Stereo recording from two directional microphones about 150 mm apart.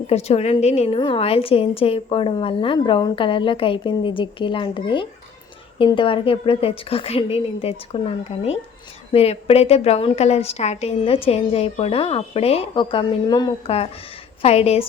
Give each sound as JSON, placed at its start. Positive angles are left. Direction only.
{"t": 0.1, "sound": "a woman's voice", "side_deg": 45}
{"t": 0.9, "sound": "a woman's voice", "side_deg": 35}
{"t": 13.7, "sound": "a woman's voice", "side_deg": 40}